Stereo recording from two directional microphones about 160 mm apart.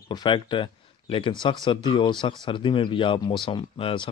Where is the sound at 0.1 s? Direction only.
30° left (ahead or behind).